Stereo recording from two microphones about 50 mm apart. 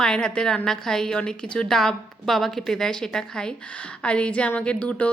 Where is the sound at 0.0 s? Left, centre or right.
Centre.